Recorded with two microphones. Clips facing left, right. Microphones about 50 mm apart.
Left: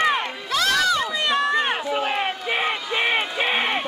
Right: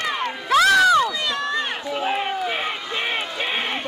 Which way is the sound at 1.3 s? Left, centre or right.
Left.